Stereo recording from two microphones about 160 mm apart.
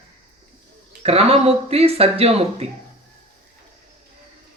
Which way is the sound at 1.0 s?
40° right (ahead or behind).